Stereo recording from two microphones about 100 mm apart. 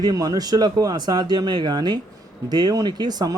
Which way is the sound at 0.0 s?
40° right (ahead or behind).